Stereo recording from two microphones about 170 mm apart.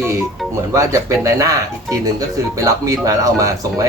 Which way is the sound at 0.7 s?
20° right (ahead or behind).